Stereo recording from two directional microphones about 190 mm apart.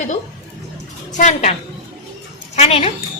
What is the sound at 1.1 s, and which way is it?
Speech, 40° left (ahead or behind).